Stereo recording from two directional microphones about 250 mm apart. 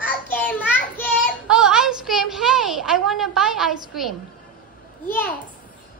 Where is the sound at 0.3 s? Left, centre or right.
Centre.